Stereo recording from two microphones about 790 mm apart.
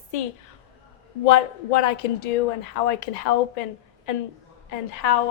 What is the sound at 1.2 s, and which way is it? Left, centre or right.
A woman's voice, left.